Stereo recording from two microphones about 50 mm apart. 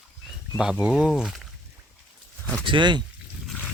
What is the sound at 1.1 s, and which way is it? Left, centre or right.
Speech, centre.